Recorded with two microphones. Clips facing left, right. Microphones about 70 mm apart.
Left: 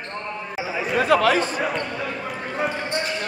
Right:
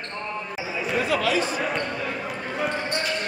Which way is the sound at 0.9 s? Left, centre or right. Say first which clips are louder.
Left 6 dB; left.